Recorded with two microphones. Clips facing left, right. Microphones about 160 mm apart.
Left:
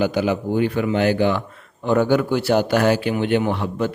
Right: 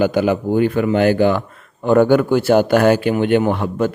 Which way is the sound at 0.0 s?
50° right (ahead or behind).